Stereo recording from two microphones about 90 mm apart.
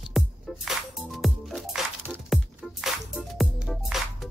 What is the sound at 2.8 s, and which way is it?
Music, 5° right (ahead or behind).